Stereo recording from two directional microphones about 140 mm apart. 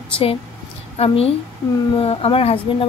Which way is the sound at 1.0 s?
45° left (ahead or behind).